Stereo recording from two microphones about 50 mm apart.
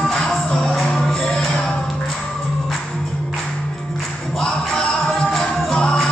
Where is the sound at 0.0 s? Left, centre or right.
Centre.